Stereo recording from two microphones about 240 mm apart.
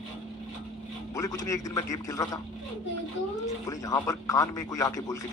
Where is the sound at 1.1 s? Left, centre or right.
Centre.